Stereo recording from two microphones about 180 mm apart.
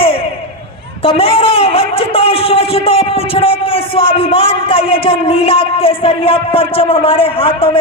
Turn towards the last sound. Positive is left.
turn(degrees=30)  # may be behind; listen again after turning